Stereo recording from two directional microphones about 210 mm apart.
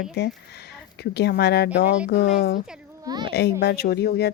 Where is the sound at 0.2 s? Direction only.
55° left (ahead or behind).